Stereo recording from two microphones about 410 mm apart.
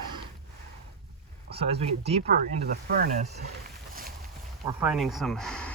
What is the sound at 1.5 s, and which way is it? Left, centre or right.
Speech, centre.